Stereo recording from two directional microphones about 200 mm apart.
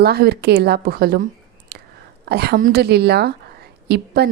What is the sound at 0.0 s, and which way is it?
A woman's voice, 50° right (ahead or behind).